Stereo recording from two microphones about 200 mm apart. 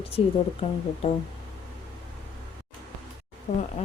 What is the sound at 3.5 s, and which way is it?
Speech, 40° left (ahead or behind).